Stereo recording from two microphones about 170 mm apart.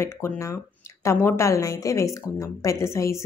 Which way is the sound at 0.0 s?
15° left (ahead or behind).